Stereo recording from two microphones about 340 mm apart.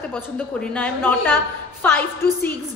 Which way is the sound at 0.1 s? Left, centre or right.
Centre.